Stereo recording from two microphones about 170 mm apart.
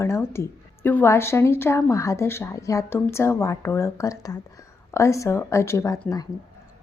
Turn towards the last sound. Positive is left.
turn(degrees=20)  # may be behind; listen again after turning